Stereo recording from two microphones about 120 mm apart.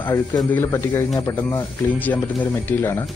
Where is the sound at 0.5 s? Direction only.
20° left (ahead or behind).